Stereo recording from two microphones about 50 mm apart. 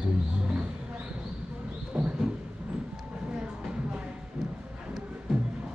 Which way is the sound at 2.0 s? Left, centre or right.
Right.